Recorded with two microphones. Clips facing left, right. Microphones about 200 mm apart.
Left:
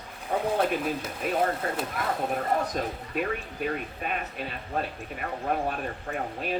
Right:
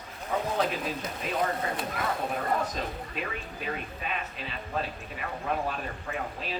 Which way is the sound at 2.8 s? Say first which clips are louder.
Left 5 dB; 50° left (ahead or behind).